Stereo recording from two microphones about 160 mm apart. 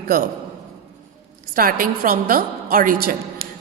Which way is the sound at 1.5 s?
65° right (ahead or behind).